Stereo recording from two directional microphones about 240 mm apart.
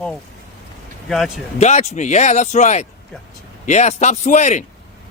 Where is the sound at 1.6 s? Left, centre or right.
Left.